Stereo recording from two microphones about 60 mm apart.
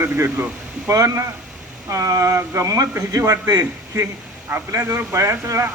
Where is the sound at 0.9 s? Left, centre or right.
Right.